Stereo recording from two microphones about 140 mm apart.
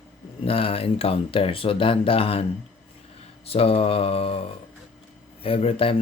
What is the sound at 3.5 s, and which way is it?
Speech, 45° left (ahead or behind).